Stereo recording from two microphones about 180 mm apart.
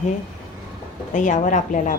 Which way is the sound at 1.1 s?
45° left (ahead or behind).